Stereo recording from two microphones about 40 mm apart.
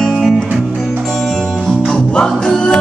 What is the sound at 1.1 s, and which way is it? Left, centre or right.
Music, centre.